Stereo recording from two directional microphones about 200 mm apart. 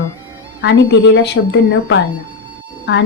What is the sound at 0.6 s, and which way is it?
A woman's voice, 60° left (ahead or behind).